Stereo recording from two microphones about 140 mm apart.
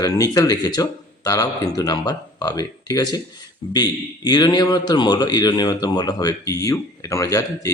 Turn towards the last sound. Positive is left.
turn(degrees=25)  # may be behind; listen again after turning